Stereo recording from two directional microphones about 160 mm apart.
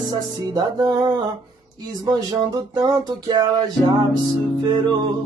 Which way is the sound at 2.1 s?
25° right (ahead or behind).